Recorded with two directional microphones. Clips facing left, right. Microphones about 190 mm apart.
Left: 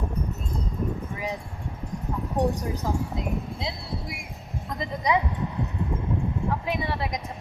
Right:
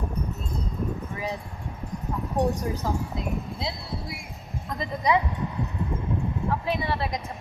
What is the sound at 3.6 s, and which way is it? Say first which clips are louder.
Speech: right 1 dB; 20° left (ahead or behind).